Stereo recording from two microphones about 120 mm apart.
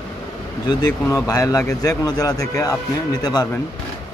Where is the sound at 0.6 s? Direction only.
30° left (ahead or behind).